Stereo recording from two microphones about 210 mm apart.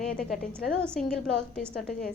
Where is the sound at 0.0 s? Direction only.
5° left (ahead or behind).